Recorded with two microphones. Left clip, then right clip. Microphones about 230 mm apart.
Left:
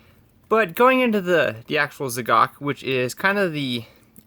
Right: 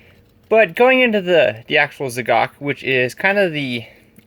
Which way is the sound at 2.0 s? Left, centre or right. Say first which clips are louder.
Right 2 dB; left.